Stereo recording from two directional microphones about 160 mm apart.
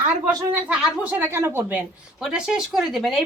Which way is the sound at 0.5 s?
5° right (ahead or behind).